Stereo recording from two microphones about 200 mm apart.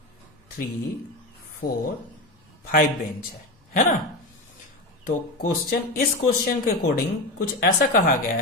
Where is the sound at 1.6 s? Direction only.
50° left (ahead or behind).